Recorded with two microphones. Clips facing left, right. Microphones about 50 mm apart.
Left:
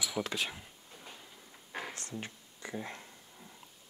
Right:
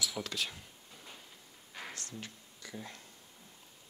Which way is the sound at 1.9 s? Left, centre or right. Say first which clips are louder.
Left 3 dB; left.